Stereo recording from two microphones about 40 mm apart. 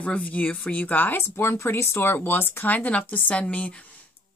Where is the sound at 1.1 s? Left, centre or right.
Left.